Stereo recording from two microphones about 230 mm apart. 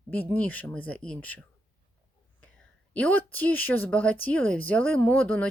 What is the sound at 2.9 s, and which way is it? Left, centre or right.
Speech, centre.